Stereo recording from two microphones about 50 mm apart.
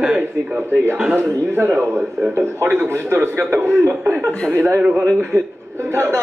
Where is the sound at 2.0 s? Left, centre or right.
Centre.